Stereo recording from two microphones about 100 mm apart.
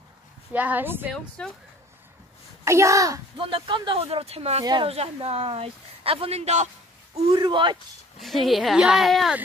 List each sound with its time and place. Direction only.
0.5 s speech: 15° right (ahead or behind)
1.4 s speech: 10° left (ahead or behind)
2.6 s a child's voice: 30° right (ahead or behind)
3.3 s speech: 55° right (ahead or behind); by 6.5 s 80° right
7.3 s speech: 55° right (ahead or behind)
8.2 s speech: centre (ahead or behind)